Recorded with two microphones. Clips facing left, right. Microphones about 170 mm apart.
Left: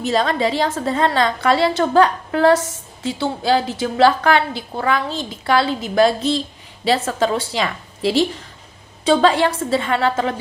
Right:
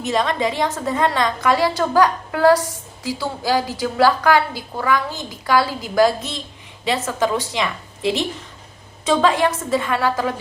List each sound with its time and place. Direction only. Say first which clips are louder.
0.0 s a woman's voice: left 2 dB; 35° left (ahead or behind)